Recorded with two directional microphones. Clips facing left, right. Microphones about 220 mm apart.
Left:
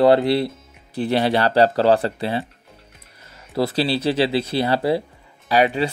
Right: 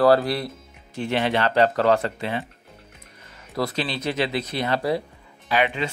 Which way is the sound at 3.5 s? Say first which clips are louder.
Left 6 dB; 30° left (ahead or behind).